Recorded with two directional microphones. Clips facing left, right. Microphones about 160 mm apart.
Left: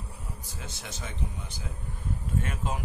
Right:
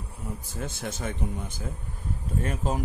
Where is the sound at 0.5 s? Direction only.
50° right (ahead or behind).